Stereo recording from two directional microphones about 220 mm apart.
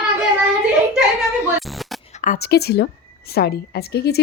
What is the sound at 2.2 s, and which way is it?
Speech, 40° left (ahead or behind).